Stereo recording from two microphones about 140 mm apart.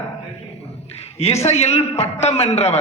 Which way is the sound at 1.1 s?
50° left (ahead or behind).